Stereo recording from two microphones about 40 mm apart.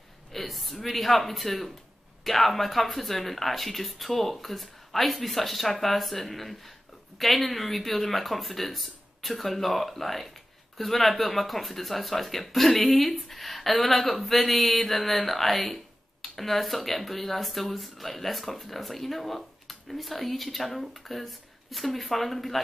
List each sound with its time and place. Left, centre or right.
0.3 s speech: centre